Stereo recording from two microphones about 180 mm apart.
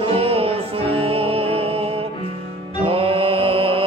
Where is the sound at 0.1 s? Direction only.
30° right (ahead or behind).